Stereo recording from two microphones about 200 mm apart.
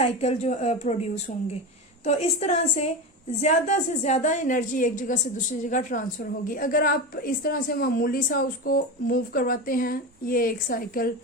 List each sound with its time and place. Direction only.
0.0 s a woman's voice: 30° left (ahead or behind)